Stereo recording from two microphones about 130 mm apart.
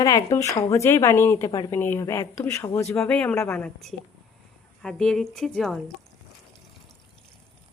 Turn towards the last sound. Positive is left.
turn(degrees=5)  # may be behind; listen again after turning